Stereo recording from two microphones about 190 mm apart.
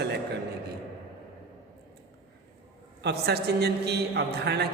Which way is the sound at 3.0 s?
60° right (ahead or behind).